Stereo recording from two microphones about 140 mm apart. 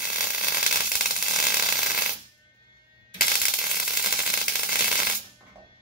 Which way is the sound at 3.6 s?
5° right (ahead or behind).